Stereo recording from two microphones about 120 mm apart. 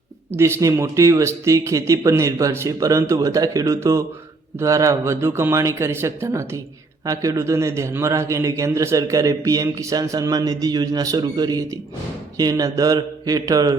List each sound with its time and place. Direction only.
0.3 s a man's voice: 20° right (ahead or behind)